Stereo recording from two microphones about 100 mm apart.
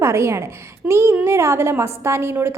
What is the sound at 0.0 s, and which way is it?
A woman's voice, 30° right (ahead or behind).